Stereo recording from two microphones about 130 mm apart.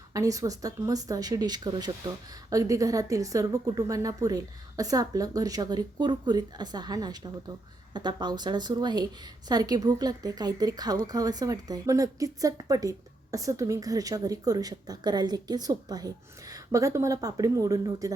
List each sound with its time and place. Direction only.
0.1 s speech: 25° right (ahead or behind)